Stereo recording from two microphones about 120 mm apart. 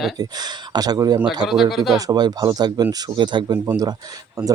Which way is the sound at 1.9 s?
35° right (ahead or behind).